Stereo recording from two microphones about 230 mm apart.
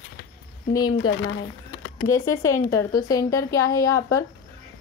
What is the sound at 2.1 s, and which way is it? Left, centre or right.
A woman's voice, centre.